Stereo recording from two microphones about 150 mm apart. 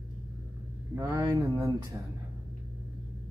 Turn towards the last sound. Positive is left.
turn(degrees=-20)  # may be behind; listen again after turning